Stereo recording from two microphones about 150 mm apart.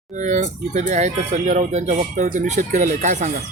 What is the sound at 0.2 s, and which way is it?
Speech, 55° right (ahead or behind).